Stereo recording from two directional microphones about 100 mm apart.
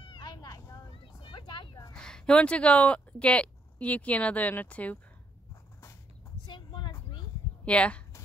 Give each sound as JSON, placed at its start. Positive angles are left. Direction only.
{"t": 0.0, "sound": "vehicle", "side_deg": 50}
{"t": 1.0, "sound": "vehicle", "side_deg": 55}
{"t": 1.9, "sound": "speech", "side_deg": 10}
{"t": 6.4, "sound": "a sound", "side_deg": 50}
{"t": 7.6, "sound": "speech", "side_deg": 10}